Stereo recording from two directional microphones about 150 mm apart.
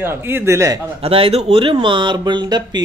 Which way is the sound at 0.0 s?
15° right (ahead or behind).